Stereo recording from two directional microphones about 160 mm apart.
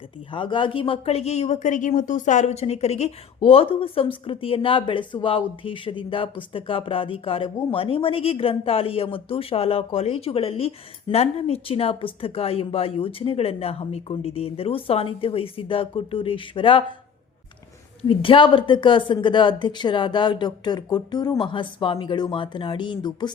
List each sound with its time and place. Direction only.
0.3 s speech: 30° left (ahead or behind)
18.1 s speech: 35° left (ahead or behind)